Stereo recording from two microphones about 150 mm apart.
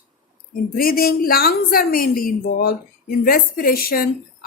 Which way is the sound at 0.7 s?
80° left.